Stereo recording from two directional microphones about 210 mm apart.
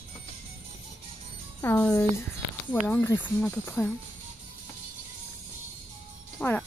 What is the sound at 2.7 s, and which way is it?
Speech, 10° left (ahead or behind).